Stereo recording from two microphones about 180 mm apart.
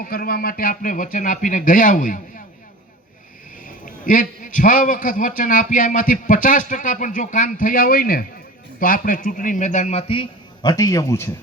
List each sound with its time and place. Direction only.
0.0 s a man's voice: 55° left (ahead or behind)
4.0 s a man's voice: 50° left (ahead or behind); by 11.3 s 15° left (ahead or behind)